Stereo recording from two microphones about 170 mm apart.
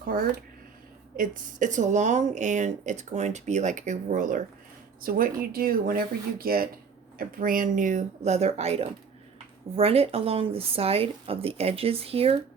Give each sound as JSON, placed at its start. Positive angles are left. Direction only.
{"t": 0.0, "sound": "speech", "side_deg": -55}